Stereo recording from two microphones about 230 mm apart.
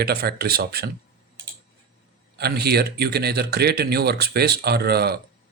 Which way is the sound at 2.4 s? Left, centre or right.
Right.